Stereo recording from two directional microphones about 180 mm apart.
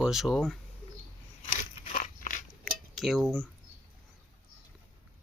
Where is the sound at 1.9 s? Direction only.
50° left (ahead or behind).